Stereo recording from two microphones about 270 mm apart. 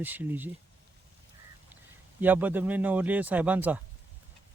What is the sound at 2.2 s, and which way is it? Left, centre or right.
Speech, centre.